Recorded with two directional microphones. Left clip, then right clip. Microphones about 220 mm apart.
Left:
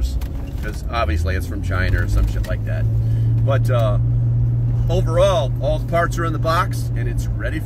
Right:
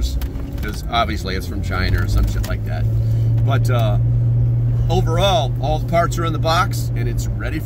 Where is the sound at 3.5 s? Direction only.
15° right (ahead or behind).